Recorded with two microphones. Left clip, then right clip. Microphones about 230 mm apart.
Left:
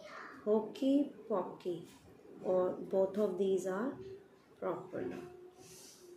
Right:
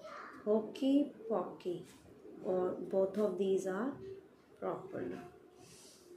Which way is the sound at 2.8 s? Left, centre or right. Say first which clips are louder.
Left 1 dB; centre.